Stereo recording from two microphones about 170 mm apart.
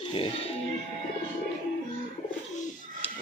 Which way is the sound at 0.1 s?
30° left (ahead or behind).